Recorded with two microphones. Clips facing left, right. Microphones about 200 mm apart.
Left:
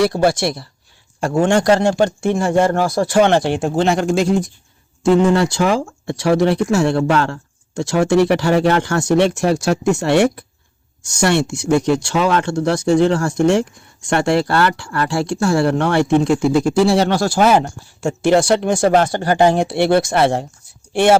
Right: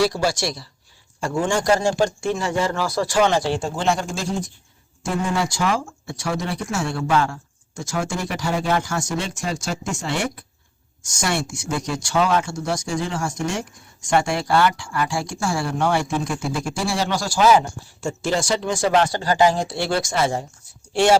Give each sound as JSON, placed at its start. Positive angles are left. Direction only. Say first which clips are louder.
{"t": 0.0, "sound": "speech", "louder": "left 5 dB", "side_deg": 55}
{"t": 20.9, "sound": "speech", "louder": "left 4 dB", "side_deg": 55}